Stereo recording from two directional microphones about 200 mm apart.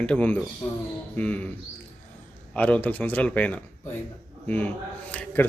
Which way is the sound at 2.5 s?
5° left (ahead or behind).